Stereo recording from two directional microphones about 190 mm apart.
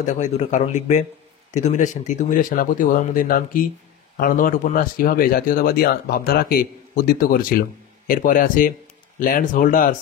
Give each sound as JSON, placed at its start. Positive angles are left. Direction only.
{"t": 0.0, "sound": "a man's voice", "side_deg": 40}